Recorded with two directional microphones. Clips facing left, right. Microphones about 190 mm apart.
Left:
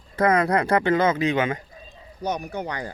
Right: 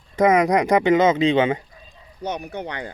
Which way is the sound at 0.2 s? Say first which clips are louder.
Right 3 dB; 15° right (ahead or behind).